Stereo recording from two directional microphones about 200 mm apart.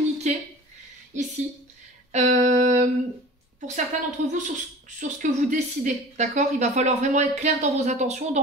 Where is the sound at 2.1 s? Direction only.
35° right (ahead or behind).